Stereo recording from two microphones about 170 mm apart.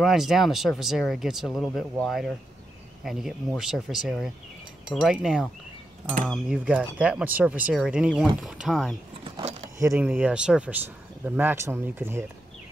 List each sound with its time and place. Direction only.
0.0 s speech: centre (ahead or behind)
9.2 s a sound: 40° right (ahead or behind)
9.8 s speech: 15° right (ahead or behind)